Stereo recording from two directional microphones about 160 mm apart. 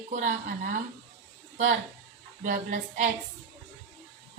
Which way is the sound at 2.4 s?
55° right (ahead or behind).